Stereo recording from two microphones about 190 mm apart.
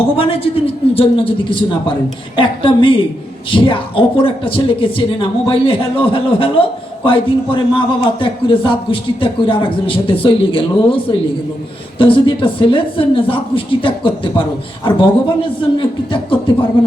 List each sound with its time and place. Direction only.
0.2 s a man's voice: 30° left (ahead or behind)